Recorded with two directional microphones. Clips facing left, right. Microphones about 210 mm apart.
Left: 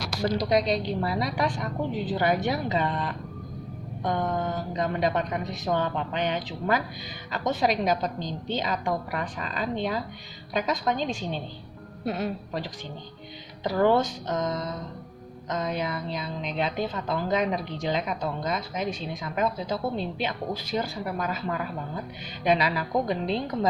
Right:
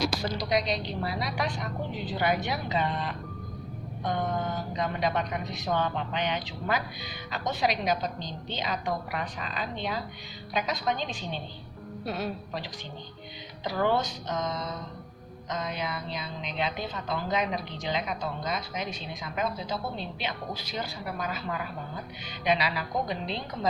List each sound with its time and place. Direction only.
0.7 s speech: 45° left (ahead or behind)
12.0 s a woman's voice: 20° left (ahead or behind)
13.7 s speech: 45° left (ahead or behind)
22.4 s speech: 45° left (ahead or behind)